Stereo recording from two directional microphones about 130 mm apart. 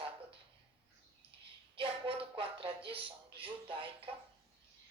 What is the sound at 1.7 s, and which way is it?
Speech, 45° right (ahead or behind).